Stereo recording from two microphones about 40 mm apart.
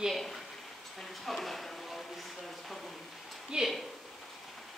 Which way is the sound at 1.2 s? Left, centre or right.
Centre.